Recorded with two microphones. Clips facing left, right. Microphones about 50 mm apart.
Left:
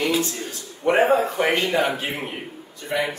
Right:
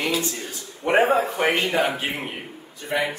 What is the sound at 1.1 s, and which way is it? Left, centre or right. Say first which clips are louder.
A man's voice: left 1 dB; centre.